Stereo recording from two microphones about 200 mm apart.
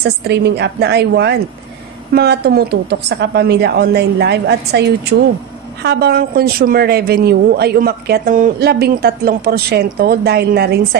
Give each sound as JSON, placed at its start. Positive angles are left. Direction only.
{"t": 0.3, "sound": "a woman's voice", "side_deg": -55}